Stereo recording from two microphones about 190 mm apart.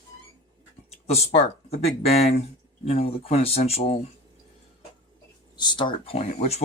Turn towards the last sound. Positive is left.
turn(degrees=35)  # may be behind; listen again after turning